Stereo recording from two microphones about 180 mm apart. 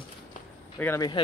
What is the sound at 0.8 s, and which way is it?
Speech, 15° left (ahead or behind).